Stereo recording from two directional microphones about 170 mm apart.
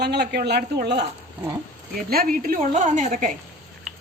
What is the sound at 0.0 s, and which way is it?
Speech, 75° right (ahead or behind).